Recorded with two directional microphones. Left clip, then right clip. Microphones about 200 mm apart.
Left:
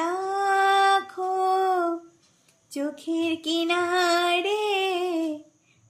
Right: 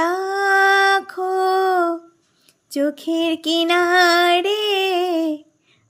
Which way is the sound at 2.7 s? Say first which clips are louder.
Right 8 dB; 40° right (ahead or behind).